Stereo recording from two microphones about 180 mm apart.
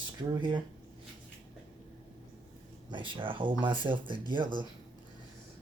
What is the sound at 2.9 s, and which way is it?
Speech, 25° right (ahead or behind).